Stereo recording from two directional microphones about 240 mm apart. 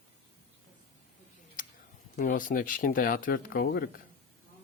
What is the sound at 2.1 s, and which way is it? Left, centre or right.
Speech, left.